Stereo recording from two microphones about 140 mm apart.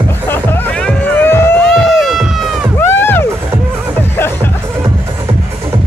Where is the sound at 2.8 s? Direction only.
15° left (ahead or behind).